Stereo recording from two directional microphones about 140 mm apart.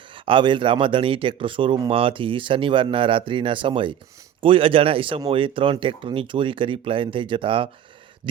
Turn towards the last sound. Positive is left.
turn(degrees=-40)  # may be behind; listen again after turning